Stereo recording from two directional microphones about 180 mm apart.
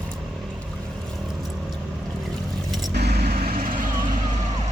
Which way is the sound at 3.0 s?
60° right (ahead or behind).